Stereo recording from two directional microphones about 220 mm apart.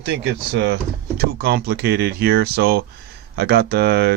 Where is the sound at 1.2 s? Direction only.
45° right (ahead or behind).